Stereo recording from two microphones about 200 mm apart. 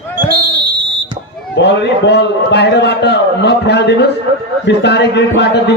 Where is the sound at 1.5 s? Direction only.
60° left (ahead or behind).